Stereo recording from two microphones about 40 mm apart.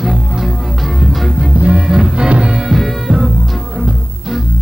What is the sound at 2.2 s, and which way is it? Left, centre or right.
Music, right.